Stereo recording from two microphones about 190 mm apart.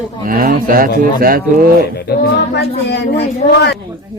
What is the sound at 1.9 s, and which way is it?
Speech, 60° left (ahead or behind).